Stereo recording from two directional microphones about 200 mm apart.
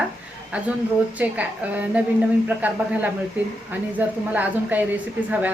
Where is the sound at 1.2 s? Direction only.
5° right (ahead or behind).